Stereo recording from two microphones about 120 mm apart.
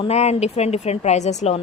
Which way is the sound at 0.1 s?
65° left (ahead or behind).